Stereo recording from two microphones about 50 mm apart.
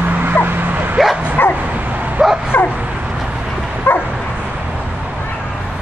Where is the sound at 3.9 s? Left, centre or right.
Left.